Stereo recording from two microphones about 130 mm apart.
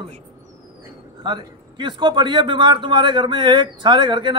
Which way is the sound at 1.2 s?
35° right (ahead or behind).